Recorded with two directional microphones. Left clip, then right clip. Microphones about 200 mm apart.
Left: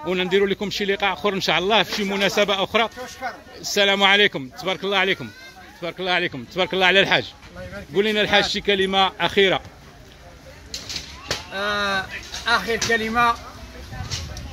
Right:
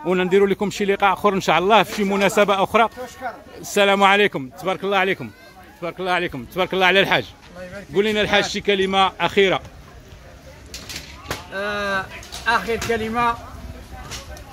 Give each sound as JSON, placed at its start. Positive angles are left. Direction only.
{"t": 0.0, "sound": "a man's voice", "side_deg": -15}
{"t": 11.5, "sound": "speech", "side_deg": -10}